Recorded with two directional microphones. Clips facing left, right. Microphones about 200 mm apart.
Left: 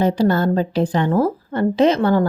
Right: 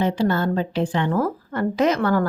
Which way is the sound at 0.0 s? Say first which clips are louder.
Left 4 dB; 40° left (ahead or behind).